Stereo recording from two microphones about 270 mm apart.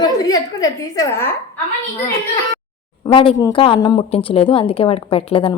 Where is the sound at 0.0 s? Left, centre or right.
Centre.